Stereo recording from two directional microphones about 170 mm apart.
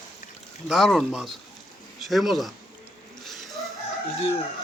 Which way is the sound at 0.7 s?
Centre (ahead or behind).